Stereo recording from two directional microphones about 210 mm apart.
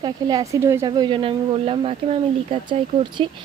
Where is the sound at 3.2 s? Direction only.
25° right (ahead or behind).